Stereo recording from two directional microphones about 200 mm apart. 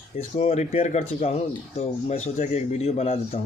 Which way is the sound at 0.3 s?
35° left (ahead or behind).